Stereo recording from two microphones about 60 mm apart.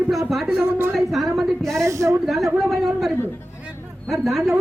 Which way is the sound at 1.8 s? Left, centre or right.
Right.